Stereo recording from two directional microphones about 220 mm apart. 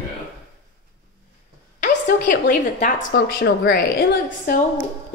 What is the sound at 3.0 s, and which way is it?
A woman's voice, 50° left (ahead or behind).